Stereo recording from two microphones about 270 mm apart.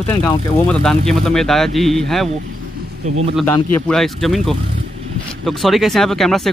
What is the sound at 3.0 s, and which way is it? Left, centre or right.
Speech, right.